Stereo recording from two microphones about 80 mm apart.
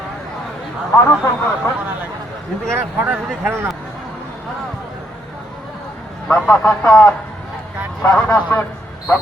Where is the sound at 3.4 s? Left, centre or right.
Right.